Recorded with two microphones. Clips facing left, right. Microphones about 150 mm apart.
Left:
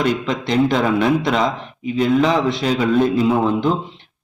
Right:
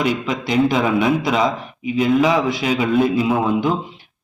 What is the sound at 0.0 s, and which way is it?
A man's voice, 5° right (ahead or behind).